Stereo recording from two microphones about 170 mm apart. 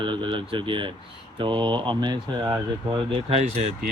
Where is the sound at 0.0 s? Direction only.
30° right (ahead or behind).